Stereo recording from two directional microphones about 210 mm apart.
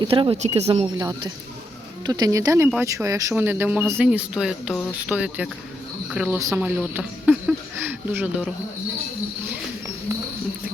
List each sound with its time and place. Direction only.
0.0 s speech: 25° right (ahead or behind); by 8.5 s 5° right (ahead or behind)